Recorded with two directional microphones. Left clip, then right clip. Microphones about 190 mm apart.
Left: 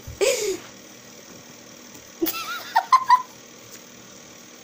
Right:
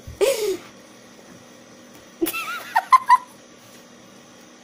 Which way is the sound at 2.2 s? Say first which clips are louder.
Right 2 dB; 30° right (ahead or behind).